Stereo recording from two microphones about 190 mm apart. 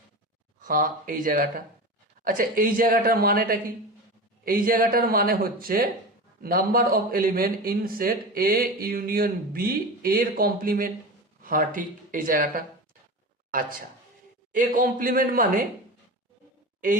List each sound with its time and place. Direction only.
0.6 s a man's voice: 45° right (ahead or behind)